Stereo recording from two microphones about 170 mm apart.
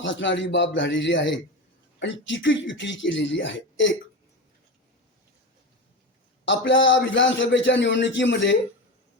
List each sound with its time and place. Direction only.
0.0 s a man's voice: 90° left
6.4 s a man's voice: 90° left